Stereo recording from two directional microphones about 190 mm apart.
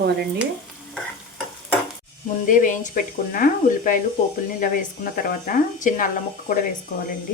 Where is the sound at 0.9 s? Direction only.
Centre (ahead or behind).